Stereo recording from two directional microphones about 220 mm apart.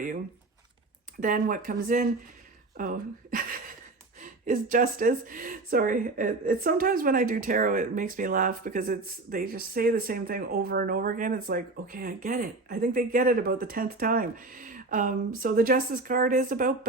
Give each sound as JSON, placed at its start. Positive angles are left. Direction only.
{"t": 1.2, "sound": "a woman's voice", "side_deg": -35}